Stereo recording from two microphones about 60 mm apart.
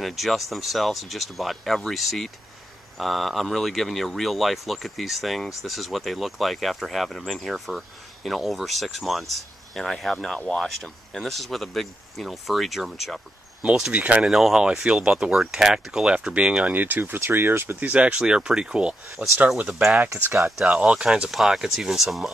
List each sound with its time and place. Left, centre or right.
0.0 s speech: centre
13.9 s speech: right
14.2 s speech: centre
16.6 s speech: right
17.7 s speech: right
19.2 s speech: right
19.7 s speech: centre
21.3 s speech: centre